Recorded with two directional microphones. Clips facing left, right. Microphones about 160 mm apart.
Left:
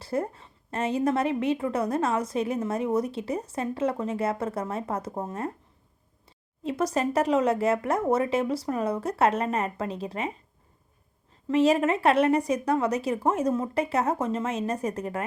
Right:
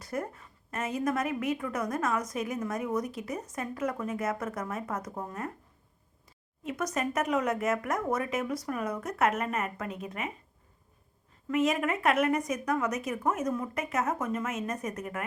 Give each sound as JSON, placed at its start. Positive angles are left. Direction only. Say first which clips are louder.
{"t": 0.0, "sound": "a woman's voice", "louder": "left 6 dB", "side_deg": 30}
{"t": 6.6, "sound": "speech", "louder": "left 6 dB", "side_deg": 30}
{"t": 11.4, "sound": "speech", "louder": "left 6 dB", "side_deg": 30}